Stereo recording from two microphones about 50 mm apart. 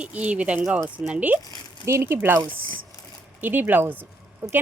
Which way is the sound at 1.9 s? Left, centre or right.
Right.